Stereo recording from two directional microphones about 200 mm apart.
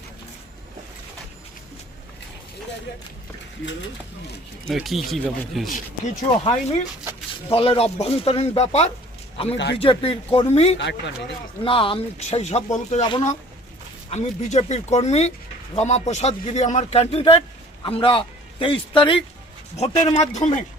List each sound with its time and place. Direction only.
4.7 s speech: centre (ahead or behind)
6.4 s a man's voice: 25° left (ahead or behind)
10.8 s speech: 60° left (ahead or behind)
11.6 s a man's voice: 25° left (ahead or behind)
14.1 s a man's voice: 35° left (ahead or behind)